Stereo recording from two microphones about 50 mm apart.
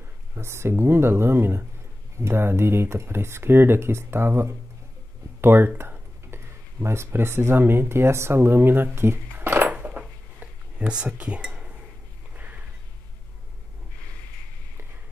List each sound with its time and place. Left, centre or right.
0.3 s speech: right
5.8 s speech: right
9.5 s dishes: right
11.1 s speech: right
11.4 s a sound: centre
12.4 s a sound: right